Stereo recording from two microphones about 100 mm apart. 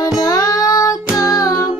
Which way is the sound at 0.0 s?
35° left (ahead or behind).